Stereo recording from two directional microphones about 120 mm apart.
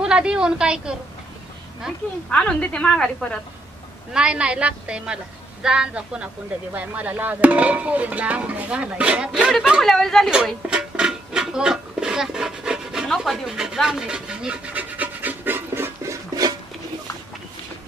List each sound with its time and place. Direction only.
0.0 s a woman's voice: 5° right (ahead or behind)
2.3 s a woman's voice: 10° left (ahead or behind)
4.1 s a woman's voice: 5° right (ahead or behind)
6.7 s music: 15° right (ahead or behind)
16.3 s a sound: 30° right (ahead or behind)